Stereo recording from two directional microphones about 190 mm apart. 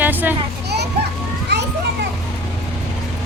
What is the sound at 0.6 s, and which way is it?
Children playing, 60° right (ahead or behind).